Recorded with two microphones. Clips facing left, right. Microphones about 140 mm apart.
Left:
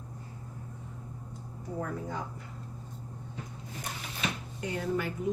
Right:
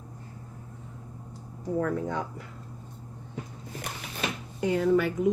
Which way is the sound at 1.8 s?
90° right.